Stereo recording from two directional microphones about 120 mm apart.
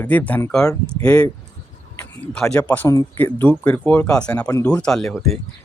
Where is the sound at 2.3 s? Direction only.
5° left (ahead or behind).